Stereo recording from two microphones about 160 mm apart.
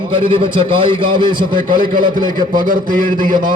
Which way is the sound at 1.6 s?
60° right (ahead or behind).